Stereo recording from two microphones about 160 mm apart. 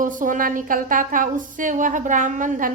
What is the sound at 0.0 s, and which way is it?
A woman's voice, 55° right (ahead or behind).